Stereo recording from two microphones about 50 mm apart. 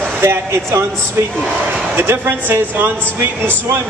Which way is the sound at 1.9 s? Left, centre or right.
Right.